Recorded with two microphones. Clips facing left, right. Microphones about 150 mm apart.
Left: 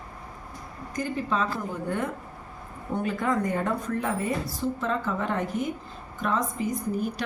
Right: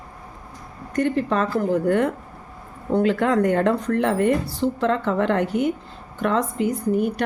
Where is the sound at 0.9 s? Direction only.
75° right (ahead or behind).